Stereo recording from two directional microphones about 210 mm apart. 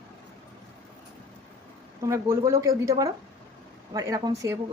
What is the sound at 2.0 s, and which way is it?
Speech, 15° right (ahead or behind).